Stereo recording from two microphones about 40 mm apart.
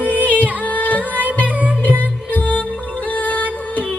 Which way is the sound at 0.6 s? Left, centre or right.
Left.